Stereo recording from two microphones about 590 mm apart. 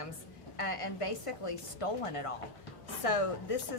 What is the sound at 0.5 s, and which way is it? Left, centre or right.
A woman's voice, left.